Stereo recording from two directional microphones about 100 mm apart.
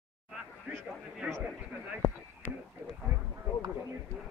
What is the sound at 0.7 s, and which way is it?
Speech, 20° right (ahead or behind).